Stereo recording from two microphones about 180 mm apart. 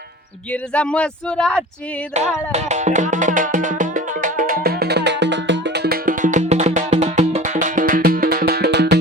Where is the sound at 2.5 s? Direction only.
40° right (ahead or behind).